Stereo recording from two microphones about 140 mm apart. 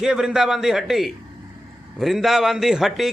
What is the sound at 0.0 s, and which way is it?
A man's voice, 5° right (ahead or behind).